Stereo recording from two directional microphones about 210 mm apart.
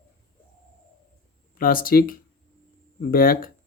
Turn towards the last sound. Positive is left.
turn(degrees=45)  # may be behind; listen again after turning